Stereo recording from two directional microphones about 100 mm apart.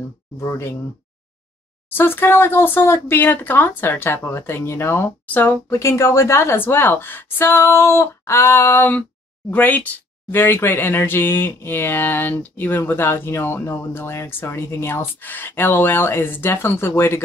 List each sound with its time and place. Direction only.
0.4 s speech: 30° left (ahead or behind)
1.9 s speech: 20° left (ahead or behind)